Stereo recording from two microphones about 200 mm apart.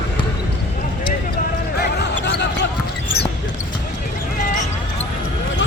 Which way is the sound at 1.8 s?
60° left (ahead or behind).